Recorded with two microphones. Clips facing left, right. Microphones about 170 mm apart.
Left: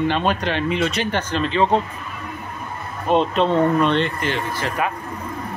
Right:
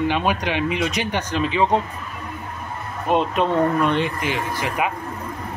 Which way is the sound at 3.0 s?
10° right (ahead or behind).